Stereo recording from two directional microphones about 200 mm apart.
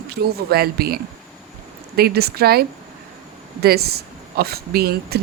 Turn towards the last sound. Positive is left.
turn(degrees=-50)  # may be behind; listen again after turning